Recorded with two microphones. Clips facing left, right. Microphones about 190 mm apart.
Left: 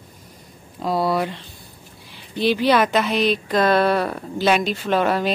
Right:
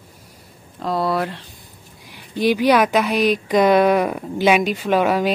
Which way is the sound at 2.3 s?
10° right (ahead or behind).